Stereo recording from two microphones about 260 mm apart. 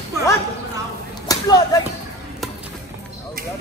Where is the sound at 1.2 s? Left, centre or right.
Centre.